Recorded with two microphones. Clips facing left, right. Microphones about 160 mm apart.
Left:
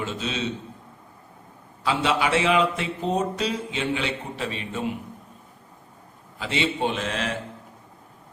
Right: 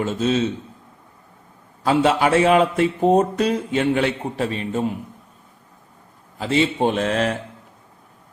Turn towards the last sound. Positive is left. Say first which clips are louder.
# right 7 dB
turn(degrees=-50)  # may be behind; listen again after turning